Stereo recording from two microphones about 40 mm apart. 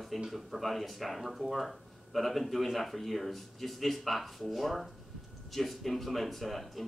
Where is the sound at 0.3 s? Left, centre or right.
Centre.